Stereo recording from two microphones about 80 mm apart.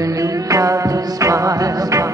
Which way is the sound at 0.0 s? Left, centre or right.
Right.